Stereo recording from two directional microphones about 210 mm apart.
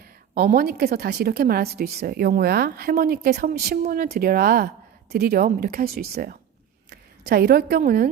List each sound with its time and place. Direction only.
0.0 s a woman's voice: 45° right (ahead or behind)